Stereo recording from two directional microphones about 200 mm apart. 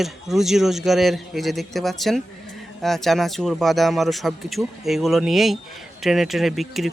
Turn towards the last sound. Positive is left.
turn(degrees=0)  # may be behind; listen again after turning